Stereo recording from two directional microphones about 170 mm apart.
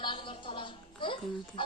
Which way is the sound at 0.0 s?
30° left (ahead or behind).